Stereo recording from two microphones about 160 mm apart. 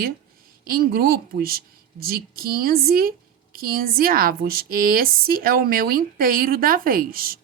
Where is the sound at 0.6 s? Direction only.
65° right (ahead or behind).